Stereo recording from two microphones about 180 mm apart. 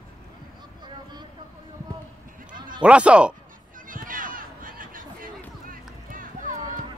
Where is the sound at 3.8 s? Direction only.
50° right (ahead or behind).